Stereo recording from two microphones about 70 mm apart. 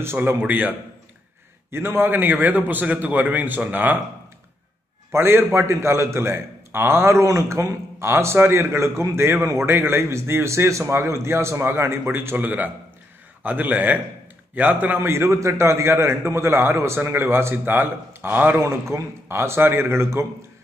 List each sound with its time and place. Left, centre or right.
0.0 s a man's voice: right
0.4 s a man's voice: right
1.7 s a man's voice: right
5.1 s a man's voice: right
12.4 s a man's voice: right
18.6 s a man's voice: right